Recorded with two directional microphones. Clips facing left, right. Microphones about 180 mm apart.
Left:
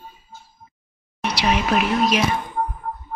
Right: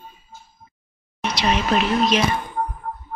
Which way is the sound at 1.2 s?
10° left (ahead or behind).